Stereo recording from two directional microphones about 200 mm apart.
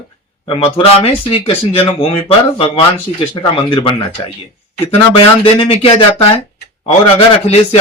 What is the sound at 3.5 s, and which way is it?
Speech, 25° left (ahead or behind).